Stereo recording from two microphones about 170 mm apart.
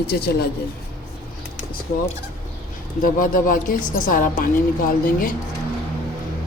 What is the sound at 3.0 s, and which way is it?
Speech, 55° left (ahead or behind).